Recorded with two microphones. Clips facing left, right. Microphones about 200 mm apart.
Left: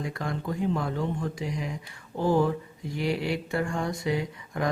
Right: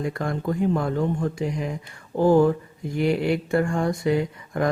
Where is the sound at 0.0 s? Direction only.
50° right (ahead or behind).